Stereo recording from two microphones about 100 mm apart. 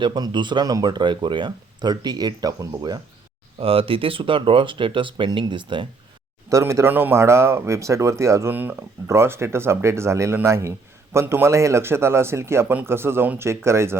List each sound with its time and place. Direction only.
0.0 s speech: 50° right (ahead or behind)
3.6 s speech: 70° right (ahead or behind); by 5.9 s 55° right (ahead or behind)
6.5 s speech: 30° right (ahead or behind)